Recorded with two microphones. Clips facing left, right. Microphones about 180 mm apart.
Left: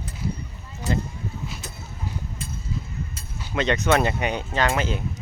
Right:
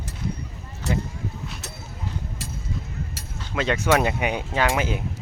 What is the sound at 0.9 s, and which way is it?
Speech, 75° right (ahead or behind).